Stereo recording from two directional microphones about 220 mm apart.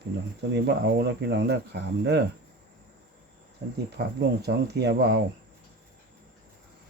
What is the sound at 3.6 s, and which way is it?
Speech, 50° right (ahead or behind).